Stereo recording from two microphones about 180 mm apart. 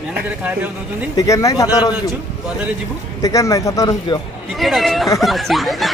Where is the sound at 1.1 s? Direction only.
15° left (ahead or behind).